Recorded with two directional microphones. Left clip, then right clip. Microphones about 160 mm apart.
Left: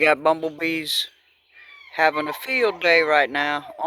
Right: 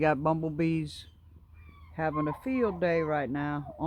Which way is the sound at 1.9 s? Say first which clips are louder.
Left 11 dB; 15° left (ahead or behind).